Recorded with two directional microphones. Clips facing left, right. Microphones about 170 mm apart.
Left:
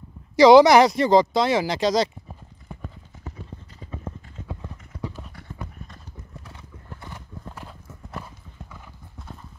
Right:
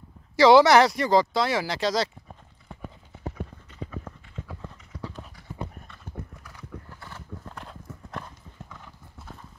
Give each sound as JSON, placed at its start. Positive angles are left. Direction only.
{"t": 0.4, "sound": "speech", "side_deg": 15}
{"t": 2.8, "sound": "clip-clop", "side_deg": -10}
{"t": 3.9, "sound": "clip-clop", "side_deg": 25}
{"t": 6.1, "sound": "clip-clop", "side_deg": -55}
{"t": 6.9, "sound": "horse", "side_deg": 15}
{"t": 7.5, "sound": "clip-clop", "side_deg": 5}